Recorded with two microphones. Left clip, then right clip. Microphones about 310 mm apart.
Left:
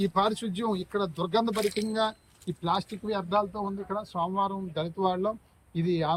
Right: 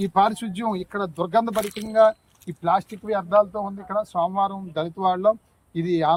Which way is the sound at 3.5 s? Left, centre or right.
Right.